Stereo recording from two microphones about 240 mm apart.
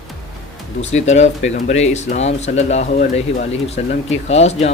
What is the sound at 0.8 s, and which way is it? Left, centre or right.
Speech, left.